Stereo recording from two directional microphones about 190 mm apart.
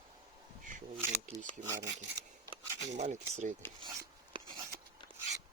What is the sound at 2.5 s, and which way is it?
Speech, 40° right (ahead or behind).